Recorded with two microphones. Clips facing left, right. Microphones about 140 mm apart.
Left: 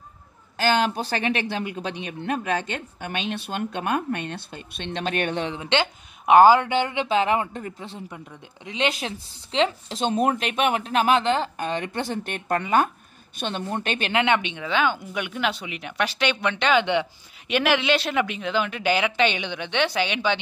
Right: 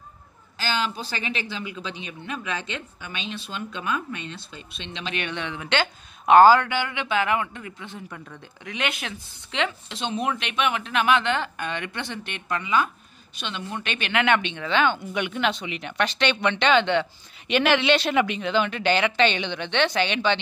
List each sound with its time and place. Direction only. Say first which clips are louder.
0.6 s speech: left 6 dB; 55° left (ahead or behind); by 6.7 s 15° left (ahead or behind)
6.7 s speech: left 4 dB; 30° left (ahead or behind)
14.2 s speech: even; 15° left (ahead or behind)
16.8 s speech: even; 15° left (ahead or behind)
17.5 s speech: right 1 dB; centre (ahead or behind)